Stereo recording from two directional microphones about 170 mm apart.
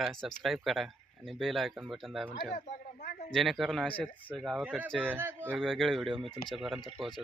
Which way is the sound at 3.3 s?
Centre (ahead or behind).